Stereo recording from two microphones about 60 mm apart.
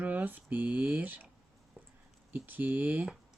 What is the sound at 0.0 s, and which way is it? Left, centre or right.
Speech, right.